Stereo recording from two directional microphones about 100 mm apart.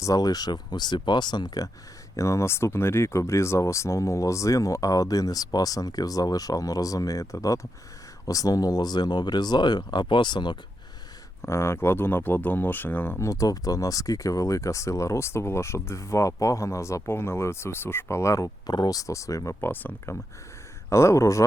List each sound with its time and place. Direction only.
0.0 s speech: 35° left (ahead or behind)
11.4 s speech: 25° left (ahead or behind)
19.6 s speech: 20° left (ahead or behind)
20.9 s speech: 30° left (ahead or behind)